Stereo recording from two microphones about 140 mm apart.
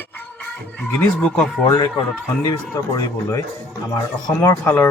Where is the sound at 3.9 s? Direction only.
25° left (ahead or behind).